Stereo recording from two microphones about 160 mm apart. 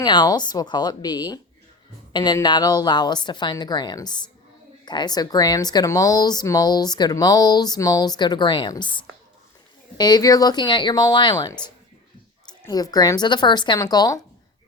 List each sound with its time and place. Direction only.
0.0 s speech: 25° left (ahead or behind)
10.0 s speech: 25° left (ahead or behind)